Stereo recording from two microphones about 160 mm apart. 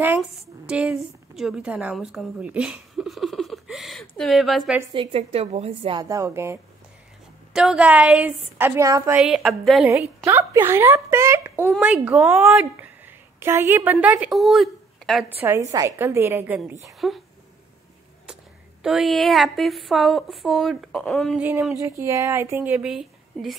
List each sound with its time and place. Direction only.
0.7 s a sound: 5° right (ahead or behind)
4.1 s a woman's voice: centre (ahead or behind)
4.9 s a woman's voice: 35° right (ahead or behind)
6.0 s speech: 20° right (ahead or behind)
7.5 s speech: 5° right (ahead or behind)
9.1 s a woman's voice: centre (ahead or behind)
9.8 s a woman's voice: 15° right (ahead or behind)
15.2 s a woman's voice: 15° right (ahead or behind)
18.2 s speech: 5° right (ahead or behind)
21.4 s speech: 10° right (ahead or behind)